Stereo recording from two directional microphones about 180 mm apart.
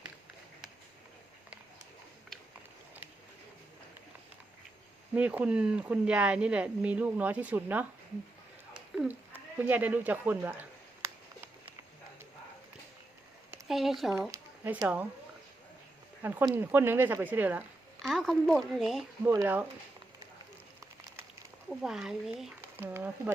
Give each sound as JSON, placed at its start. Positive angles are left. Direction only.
{"t": 5.1, "sound": "speech", "side_deg": -5}
{"t": 8.7, "sound": "sheep", "side_deg": -10}
{"t": 13.7, "sound": "speech", "side_deg": 0}
{"t": 14.2, "sound": "a sound", "side_deg": -15}
{"t": 16.2, "sound": "speech", "side_deg": -15}
{"t": 19.2, "sound": "speech", "side_deg": -15}
{"t": 21.7, "sound": "speech", "side_deg": 0}